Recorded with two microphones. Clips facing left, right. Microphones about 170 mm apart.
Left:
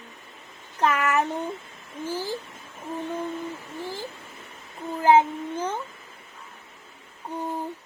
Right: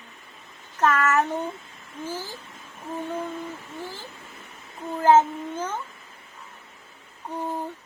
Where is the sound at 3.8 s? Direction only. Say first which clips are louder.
Left 4 dB; 15° left (ahead or behind).